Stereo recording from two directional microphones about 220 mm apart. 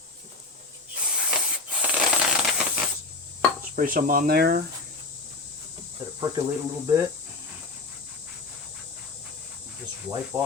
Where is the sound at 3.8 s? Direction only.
40° right (ahead or behind).